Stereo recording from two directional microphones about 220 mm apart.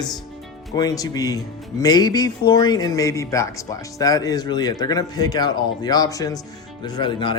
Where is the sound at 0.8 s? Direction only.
15° left (ahead or behind).